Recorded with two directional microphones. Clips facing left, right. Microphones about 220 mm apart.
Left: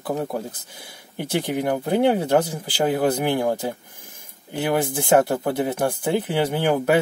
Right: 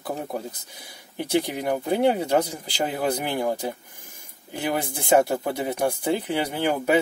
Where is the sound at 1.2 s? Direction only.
55° left (ahead or behind).